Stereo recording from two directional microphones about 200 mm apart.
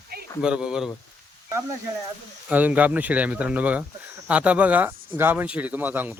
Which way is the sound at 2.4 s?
10° right (ahead or behind).